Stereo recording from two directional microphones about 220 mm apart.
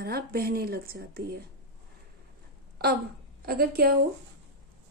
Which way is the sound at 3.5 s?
45° right (ahead or behind).